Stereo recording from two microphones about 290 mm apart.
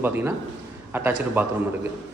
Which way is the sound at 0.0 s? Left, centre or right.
Centre.